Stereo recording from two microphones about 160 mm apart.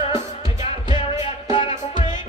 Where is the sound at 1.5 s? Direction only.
30° left (ahead or behind).